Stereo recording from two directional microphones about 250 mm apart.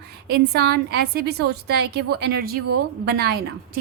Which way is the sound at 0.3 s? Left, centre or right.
Right.